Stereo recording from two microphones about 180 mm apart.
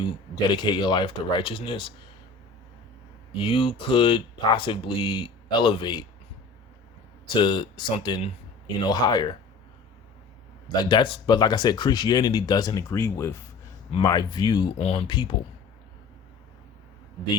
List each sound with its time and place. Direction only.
0.0 s speech: 25° left (ahead or behind)
3.3 s speech: 30° left (ahead or behind)
7.3 s speech: 25° left (ahead or behind)
10.8 s speech: 25° left (ahead or behind)